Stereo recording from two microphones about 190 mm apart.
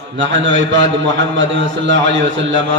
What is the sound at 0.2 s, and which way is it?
A man's voice, 75° right (ahead or behind).